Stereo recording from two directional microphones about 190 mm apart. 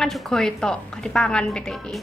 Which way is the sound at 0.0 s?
Centre (ahead or behind).